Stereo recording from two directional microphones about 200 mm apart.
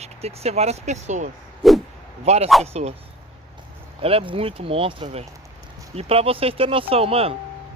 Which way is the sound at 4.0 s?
25° right (ahead or behind).